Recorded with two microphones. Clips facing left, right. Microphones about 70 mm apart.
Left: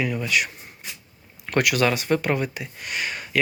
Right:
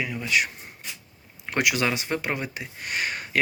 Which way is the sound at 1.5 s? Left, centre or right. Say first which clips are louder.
Left 3 dB; centre.